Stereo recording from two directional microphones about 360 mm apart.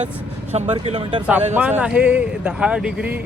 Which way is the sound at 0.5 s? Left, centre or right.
Centre.